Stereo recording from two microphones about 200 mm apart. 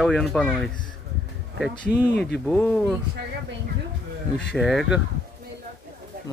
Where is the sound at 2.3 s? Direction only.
5° left (ahead or behind).